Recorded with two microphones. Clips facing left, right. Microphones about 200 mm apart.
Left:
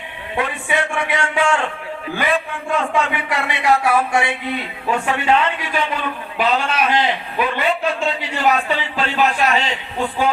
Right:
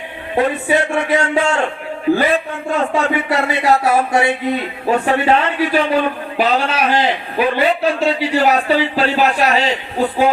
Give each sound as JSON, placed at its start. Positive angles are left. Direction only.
{"t": 0.3, "sound": "speech", "side_deg": -40}